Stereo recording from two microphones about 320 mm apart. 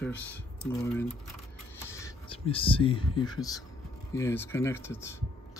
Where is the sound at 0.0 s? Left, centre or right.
Centre.